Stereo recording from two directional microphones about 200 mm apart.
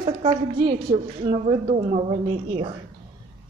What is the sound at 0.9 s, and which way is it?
A woman's voice, 30° right (ahead or behind).